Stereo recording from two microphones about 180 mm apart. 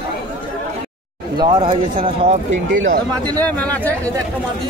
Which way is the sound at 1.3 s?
25° right (ahead or behind).